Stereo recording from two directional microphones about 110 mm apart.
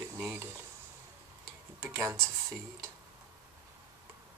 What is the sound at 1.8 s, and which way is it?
Speech, 20° right (ahead or behind).